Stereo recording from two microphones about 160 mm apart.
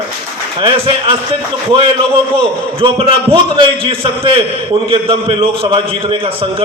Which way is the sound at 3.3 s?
30° right (ahead or behind).